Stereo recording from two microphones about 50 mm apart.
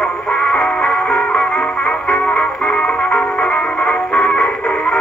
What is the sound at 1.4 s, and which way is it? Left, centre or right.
Music, centre.